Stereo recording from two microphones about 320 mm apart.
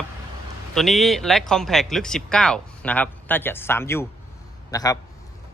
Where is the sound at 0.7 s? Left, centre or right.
Centre.